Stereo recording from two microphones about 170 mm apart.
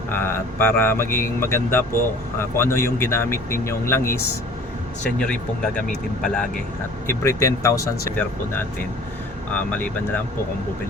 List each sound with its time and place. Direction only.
0.1 s speech: 15° left (ahead or behind)
7.1 s speech: 15° left (ahead or behind)